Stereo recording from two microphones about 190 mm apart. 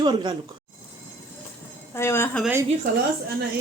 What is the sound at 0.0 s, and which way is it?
Speech, 25° right (ahead or behind).